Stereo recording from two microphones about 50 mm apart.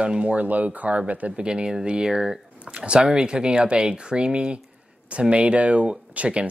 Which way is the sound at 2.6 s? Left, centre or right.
Right.